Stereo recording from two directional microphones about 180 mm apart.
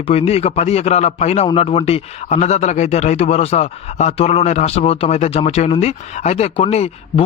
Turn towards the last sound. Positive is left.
turn(degrees=35)  # may be behind; listen again after turning